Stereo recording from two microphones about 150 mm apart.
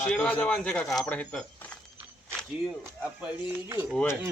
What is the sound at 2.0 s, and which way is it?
Speech, 10° right (ahead or behind).